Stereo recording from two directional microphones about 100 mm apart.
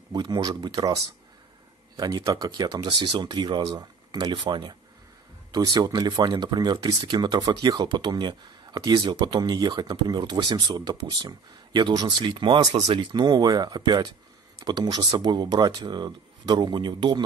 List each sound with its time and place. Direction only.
0.1 s speech: 45° right (ahead or behind)
5.5 s speech: 40° right (ahead or behind)
12.3 s speech: 55° right (ahead or behind)